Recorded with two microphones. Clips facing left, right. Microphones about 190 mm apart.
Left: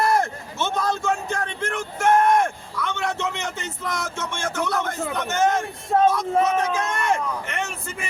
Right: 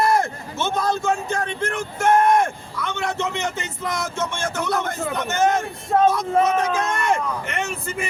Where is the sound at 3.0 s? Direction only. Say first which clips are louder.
Right 4 dB; centre (ahead or behind).